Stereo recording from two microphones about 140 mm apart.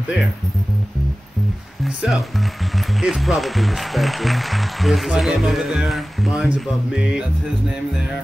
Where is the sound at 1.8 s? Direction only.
Centre (ahead or behind).